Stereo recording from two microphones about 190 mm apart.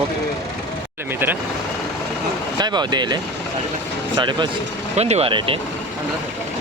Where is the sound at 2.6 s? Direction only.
20° right (ahead or behind).